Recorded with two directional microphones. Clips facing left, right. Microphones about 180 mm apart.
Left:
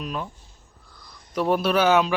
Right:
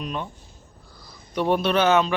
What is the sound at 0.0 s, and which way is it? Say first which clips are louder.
Speech: even; centre (ahead or behind).